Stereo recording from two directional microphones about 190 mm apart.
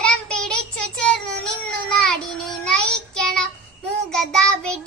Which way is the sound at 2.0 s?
Centre (ahead or behind).